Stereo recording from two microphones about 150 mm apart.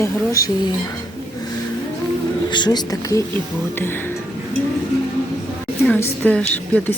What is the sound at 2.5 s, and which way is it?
Speech, 30° left (ahead or behind).